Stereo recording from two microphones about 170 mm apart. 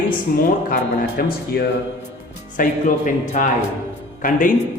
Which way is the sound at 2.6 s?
50° left (ahead or behind).